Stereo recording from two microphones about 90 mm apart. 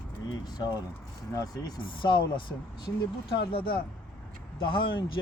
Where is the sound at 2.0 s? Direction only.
60° left (ahead or behind).